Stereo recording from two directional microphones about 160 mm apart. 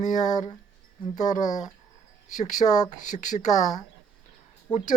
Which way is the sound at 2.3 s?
50° left (ahead or behind).